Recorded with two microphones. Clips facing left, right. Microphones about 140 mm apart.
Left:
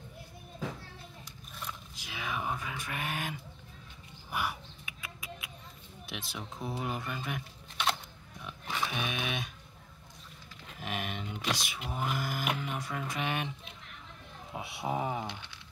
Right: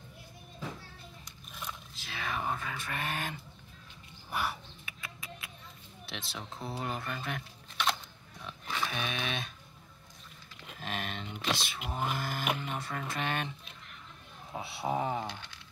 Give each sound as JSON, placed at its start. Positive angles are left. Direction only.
{"t": 1.5, "sound": "a sound", "side_deg": -5}
{"t": 2.0, "sound": "a sound", "side_deg": 10}
{"t": 4.3, "sound": "bird", "side_deg": 10}
{"t": 6.0, "sound": "speech", "side_deg": 10}
{"t": 8.5, "sound": "pig", "side_deg": 15}
{"t": 10.8, "sound": "speech", "side_deg": 15}
{"t": 14.5, "sound": "speech", "side_deg": 15}